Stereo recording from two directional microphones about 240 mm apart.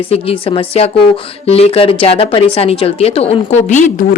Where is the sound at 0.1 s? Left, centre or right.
Left.